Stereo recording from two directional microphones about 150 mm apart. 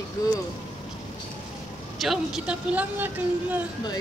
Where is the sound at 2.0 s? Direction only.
Centre (ahead or behind).